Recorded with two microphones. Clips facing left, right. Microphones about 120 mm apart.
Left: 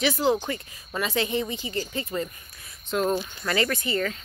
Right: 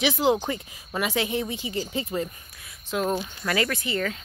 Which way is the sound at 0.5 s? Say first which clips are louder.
Right 1 dB; 10° right (ahead or behind).